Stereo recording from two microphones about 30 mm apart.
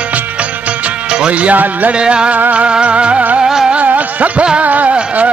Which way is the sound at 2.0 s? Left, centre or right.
Right.